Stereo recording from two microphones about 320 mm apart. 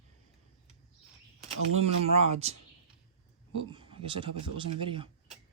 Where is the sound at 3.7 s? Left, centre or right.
Centre.